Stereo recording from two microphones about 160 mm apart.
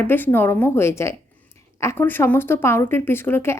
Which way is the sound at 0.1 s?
15° left (ahead or behind).